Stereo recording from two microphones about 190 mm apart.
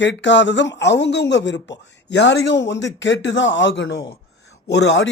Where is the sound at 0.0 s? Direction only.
70° left (ahead or behind).